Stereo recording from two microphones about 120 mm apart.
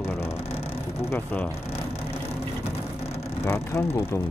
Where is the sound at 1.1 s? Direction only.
15° left (ahead or behind).